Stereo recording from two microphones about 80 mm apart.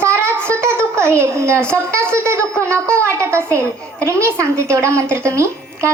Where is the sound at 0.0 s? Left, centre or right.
Right.